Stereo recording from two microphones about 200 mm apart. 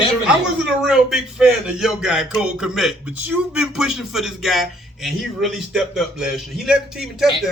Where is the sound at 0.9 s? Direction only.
Centre (ahead or behind).